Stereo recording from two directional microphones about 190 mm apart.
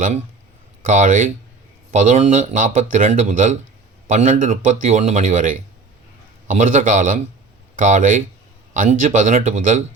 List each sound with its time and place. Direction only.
0.9 s a man's voice: 40° right (ahead or behind)